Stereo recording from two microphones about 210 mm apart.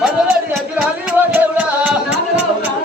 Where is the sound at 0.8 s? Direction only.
10° right (ahead or behind).